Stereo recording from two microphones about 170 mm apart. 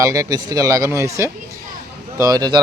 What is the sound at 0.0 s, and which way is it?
Speech, 20° right (ahead or behind).